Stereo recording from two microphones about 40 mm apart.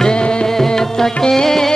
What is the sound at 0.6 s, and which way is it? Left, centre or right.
Music, centre.